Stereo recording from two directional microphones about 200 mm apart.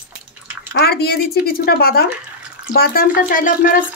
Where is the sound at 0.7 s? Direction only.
50° left (ahead or behind).